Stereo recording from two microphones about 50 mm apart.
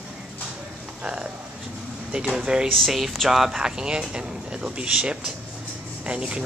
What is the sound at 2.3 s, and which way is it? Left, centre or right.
Speech, centre.